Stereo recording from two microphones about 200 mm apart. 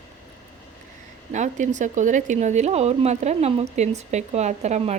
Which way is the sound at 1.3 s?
35° right (ahead or behind).